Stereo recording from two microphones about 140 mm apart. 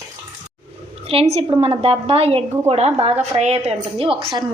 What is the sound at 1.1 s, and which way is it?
Speech, 45° right (ahead or behind).